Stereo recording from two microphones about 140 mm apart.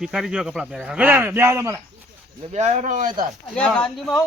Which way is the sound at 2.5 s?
55° right (ahead or behind).